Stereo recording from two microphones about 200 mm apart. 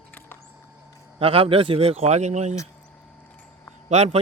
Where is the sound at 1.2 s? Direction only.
30° right (ahead or behind).